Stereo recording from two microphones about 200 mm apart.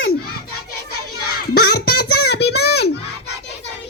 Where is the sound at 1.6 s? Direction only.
90° left.